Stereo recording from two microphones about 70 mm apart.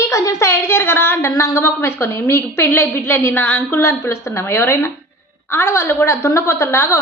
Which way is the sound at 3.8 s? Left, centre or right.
Left.